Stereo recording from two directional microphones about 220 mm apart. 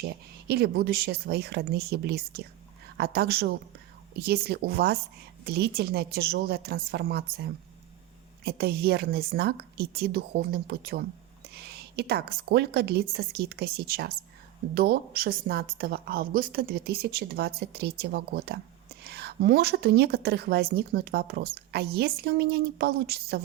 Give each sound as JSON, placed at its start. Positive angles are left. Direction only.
{"t": 0.0, "sound": "a woman's voice", "side_deg": -45}